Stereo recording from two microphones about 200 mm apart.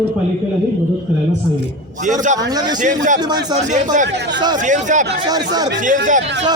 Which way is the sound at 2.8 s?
40° right (ahead or behind).